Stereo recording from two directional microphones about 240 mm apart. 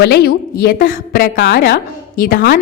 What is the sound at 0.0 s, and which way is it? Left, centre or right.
A woman's voice, left.